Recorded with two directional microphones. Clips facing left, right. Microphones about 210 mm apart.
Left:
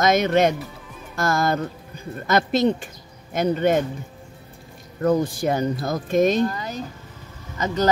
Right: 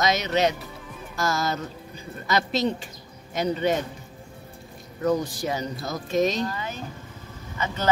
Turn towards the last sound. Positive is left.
turn(degrees=40)  # may be behind; listen again after turning